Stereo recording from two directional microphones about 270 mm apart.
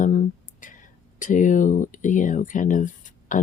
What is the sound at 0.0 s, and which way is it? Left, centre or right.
Speech, left.